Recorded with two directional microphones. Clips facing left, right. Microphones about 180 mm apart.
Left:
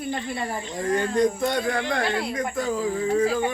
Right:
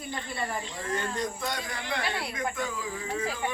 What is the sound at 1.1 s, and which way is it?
Speech, 55° left (ahead or behind).